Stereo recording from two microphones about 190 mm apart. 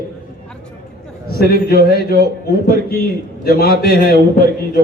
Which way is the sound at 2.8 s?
50° left (ahead or behind).